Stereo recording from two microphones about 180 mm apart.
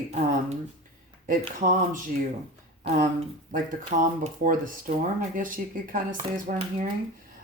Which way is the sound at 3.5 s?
40° right (ahead or behind).